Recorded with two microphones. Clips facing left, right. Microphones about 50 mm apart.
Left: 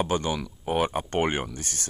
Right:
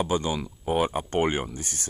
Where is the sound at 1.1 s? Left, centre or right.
Left.